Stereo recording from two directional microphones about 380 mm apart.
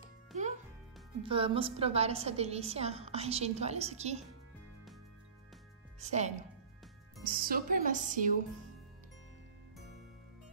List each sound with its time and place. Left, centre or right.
0.3 s music: centre
1.2 s a woman's voice: centre
5.9 s a woman's voice: centre